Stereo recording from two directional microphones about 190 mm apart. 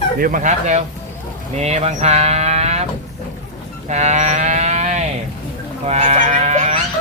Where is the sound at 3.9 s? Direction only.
35° right (ahead or behind).